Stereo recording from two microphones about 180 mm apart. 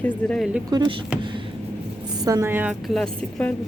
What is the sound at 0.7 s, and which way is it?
Speech, 25° right (ahead or behind).